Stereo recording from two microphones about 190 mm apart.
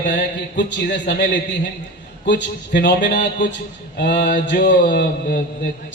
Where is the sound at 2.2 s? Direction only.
70° left (ahead or behind).